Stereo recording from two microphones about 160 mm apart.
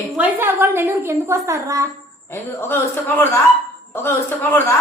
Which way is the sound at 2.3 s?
15° left (ahead or behind).